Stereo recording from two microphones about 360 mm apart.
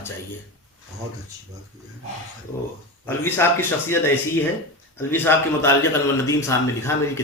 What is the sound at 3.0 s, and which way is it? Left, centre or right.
A man's voice, centre.